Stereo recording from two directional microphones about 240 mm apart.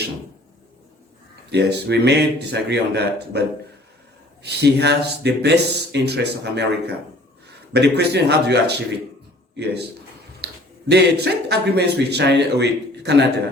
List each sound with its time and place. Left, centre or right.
1.5 s speech: right
4.4 s speech: right
10.4 s speech: right